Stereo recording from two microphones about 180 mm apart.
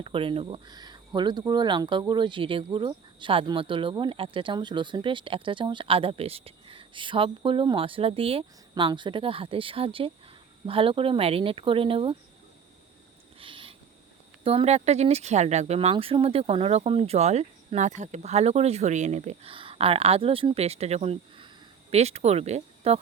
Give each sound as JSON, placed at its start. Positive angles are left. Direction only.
{"t": 0.0, "sound": "speech", "side_deg": -30}
{"t": 13.4, "sound": "owl", "side_deg": -30}
{"t": 14.4, "sound": "speech", "side_deg": -35}